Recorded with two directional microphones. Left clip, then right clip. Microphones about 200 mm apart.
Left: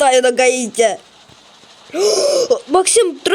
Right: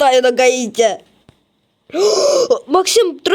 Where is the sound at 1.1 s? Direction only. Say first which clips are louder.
Left 11 dB; 55° left (ahead or behind).